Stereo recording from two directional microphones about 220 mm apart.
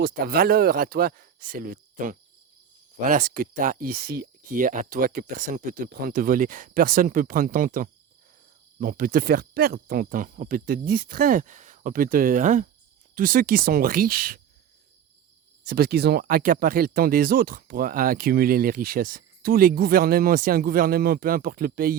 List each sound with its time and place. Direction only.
0.0 s speech: 45° right (ahead or behind)
15.6 s speech: 45° right (ahead or behind)